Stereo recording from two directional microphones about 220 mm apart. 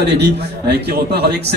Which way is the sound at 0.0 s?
50° right (ahead or behind).